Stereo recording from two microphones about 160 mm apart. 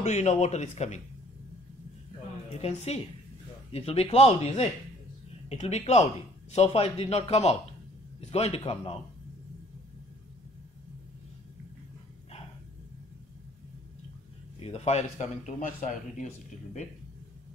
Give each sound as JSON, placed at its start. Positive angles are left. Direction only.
{"t": 0.0, "sound": "a man's voice", "side_deg": 45}
{"t": 2.6, "sound": "a man's voice", "side_deg": 40}
{"t": 14.6, "sound": "a man's voice", "side_deg": 40}